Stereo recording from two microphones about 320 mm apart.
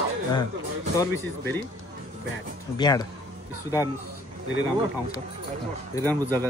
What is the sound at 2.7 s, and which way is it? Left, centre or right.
Speech, centre.